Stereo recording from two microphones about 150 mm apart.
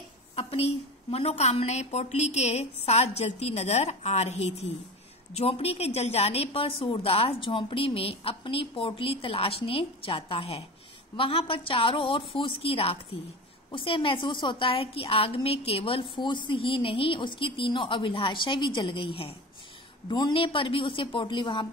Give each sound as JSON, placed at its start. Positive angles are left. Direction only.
{"t": 0.4, "sound": "a woman's voice", "side_deg": 40}